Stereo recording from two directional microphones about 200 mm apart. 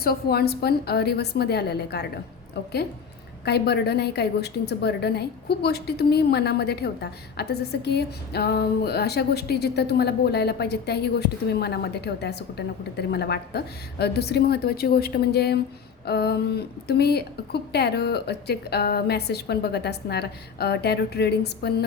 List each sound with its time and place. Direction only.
0.0 s a woman's voice: 50° left (ahead or behind)
3.4 s a woman's voice: 55° left (ahead or behind)